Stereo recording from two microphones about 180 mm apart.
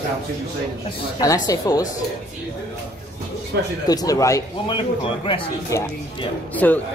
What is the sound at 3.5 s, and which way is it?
Speech, 60° right (ahead or behind).